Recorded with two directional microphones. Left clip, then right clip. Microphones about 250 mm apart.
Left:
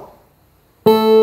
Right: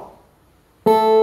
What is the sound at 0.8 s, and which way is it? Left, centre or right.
Music, left.